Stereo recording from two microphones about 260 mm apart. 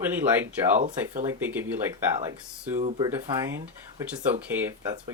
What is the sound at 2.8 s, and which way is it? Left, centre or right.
Speech, right.